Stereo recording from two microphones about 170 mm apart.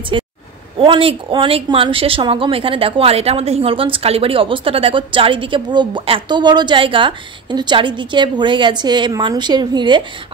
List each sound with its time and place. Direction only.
0.1 s speech: 30° right (ahead or behind)